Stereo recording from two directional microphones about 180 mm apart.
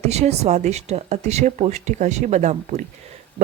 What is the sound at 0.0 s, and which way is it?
Speech, 35° right (ahead or behind).